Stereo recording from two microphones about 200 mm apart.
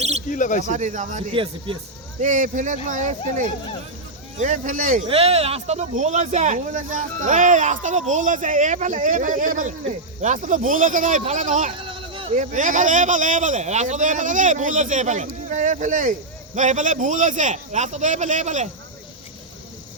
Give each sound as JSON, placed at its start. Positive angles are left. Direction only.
{"t": 0.3, "sound": "speech", "side_deg": 40}
{"t": 0.7, "sound": "speech", "side_deg": -40}
{"t": 1.3, "sound": "speech", "side_deg": -25}
{"t": 2.2, "sound": "speech", "side_deg": -40}
{"t": 5.0, "sound": "speech", "side_deg": -30}
{"t": 11.8, "sound": "a sound", "side_deg": -25}
{"t": 12.4, "sound": "speech", "side_deg": -40}